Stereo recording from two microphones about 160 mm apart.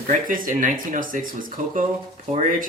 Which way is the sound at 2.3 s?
45° right (ahead or behind).